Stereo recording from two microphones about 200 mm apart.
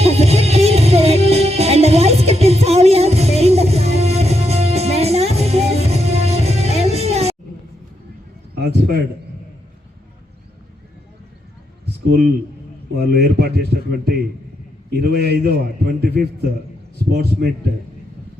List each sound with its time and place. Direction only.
0.0 s music: 30° right (ahead or behind)
8.5 s a sound: 50° right (ahead or behind)
12.0 s a man's voice: 55° right (ahead or behind)
14.8 s a man's voice: 50° right (ahead or behind)